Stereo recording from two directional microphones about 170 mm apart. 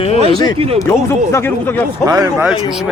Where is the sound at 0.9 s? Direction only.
15° left (ahead or behind).